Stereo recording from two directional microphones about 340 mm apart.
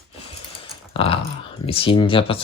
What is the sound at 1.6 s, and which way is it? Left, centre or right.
Speech, centre.